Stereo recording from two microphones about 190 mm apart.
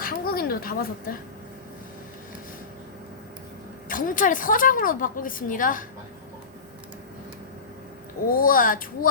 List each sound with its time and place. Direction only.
0.0 s a sound: 50° left (ahead or behind)
3.8 s a woman's voice: 45° left (ahead or behind)
8.3 s a woman's voice: 45° left (ahead or behind)